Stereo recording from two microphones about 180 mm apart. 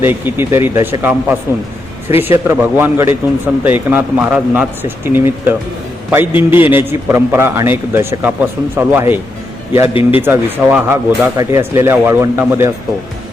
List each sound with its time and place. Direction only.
0.0 s speech: 10° right (ahead or behind)
9.9 s speech: 30° left (ahead or behind)
10.2 s speech: 10° right (ahead or behind)